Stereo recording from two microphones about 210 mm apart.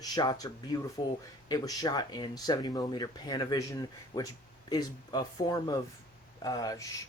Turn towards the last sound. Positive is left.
turn(degrees=15)  # may be behind; listen again after turning